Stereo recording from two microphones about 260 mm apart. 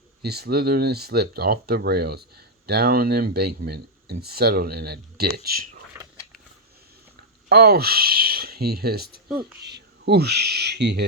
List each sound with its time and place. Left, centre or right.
0.2 s speech: right
5.9 s a sound: centre
7.5 s speech: right